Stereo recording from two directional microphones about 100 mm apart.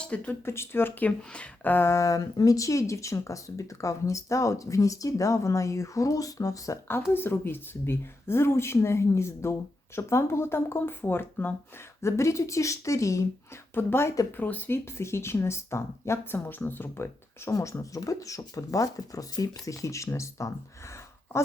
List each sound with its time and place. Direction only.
0.0 s speech: 15° left (ahead or behind)
0.4 s speech: 25° left (ahead or behind)